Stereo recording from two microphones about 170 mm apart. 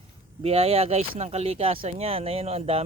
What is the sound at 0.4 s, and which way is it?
Speech, 35° right (ahead or behind).